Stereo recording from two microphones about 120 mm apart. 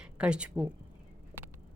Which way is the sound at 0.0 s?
10° right (ahead or behind).